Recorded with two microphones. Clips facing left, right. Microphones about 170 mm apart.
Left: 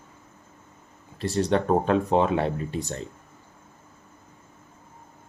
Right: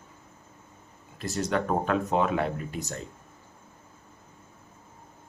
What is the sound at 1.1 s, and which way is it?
Speech, 30° left (ahead or behind).